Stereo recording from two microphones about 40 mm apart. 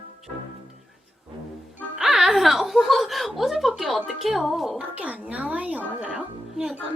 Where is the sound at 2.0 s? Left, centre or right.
Centre.